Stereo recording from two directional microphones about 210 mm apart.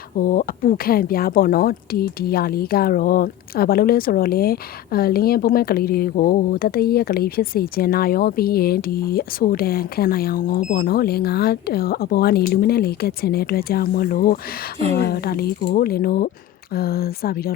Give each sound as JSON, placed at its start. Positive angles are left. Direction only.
{"t": 0.2, "sound": "speech", "side_deg": 40}